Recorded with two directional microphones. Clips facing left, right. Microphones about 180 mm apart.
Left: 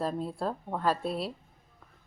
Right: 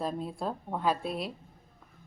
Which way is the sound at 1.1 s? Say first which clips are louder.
Left 2 dB; 30° left (ahead or behind).